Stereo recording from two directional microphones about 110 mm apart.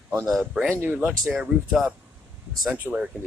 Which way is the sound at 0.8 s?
20° right (ahead or behind).